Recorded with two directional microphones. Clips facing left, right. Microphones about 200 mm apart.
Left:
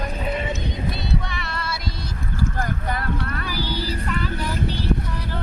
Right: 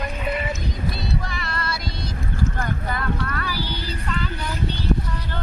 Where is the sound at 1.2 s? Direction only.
Centre (ahead or behind).